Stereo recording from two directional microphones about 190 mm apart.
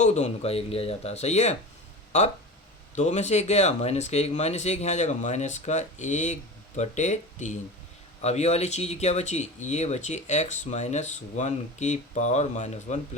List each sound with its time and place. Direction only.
0.0 s speech: 35° left (ahead or behind)